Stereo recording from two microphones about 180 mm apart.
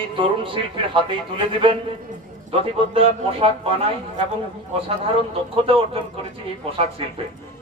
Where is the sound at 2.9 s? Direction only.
30° right (ahead or behind).